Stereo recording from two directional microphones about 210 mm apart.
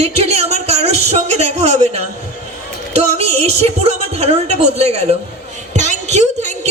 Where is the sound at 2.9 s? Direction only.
30° right (ahead or behind).